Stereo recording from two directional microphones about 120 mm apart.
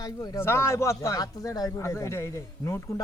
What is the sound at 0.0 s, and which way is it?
Speech, 30° left (ahead or behind).